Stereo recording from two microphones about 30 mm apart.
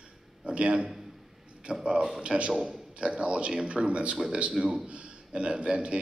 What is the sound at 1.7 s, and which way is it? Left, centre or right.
Speech, right.